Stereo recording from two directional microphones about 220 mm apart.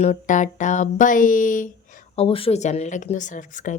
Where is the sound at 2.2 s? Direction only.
25° left (ahead or behind).